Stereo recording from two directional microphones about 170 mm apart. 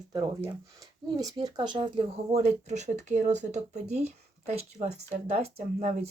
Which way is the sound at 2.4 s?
40° right (ahead or behind).